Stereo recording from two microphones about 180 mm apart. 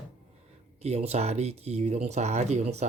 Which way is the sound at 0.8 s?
35° right (ahead or behind).